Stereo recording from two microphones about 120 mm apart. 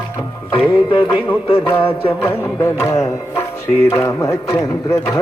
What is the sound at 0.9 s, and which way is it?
Music, 45° left (ahead or behind).